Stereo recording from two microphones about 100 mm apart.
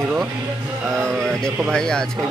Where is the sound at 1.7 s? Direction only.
5° left (ahead or behind).